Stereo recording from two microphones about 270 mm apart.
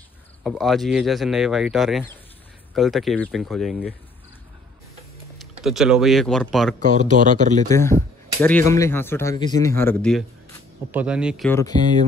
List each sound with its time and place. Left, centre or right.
0.4 s speech: centre
5.4 s speech: centre
6.8 s speech: right
7.7 s speech: centre
10.9 s speech: centre